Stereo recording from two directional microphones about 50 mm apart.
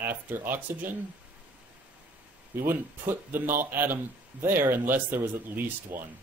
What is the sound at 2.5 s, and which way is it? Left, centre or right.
Speech, right.